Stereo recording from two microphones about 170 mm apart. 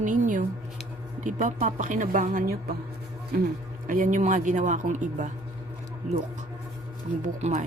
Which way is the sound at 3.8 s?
50° right (ahead or behind).